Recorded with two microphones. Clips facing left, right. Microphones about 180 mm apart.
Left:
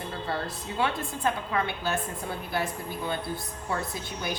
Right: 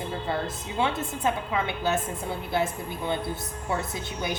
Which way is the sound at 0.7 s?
20° right (ahead or behind).